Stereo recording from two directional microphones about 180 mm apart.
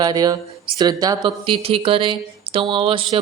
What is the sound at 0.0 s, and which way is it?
Speech, 20° right (ahead or behind).